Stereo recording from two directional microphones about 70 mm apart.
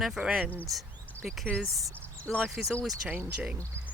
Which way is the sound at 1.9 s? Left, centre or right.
Left.